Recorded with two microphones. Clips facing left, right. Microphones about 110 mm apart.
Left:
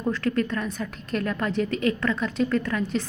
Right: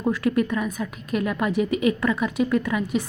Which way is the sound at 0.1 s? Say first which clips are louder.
Right 3 dB; 15° right (ahead or behind).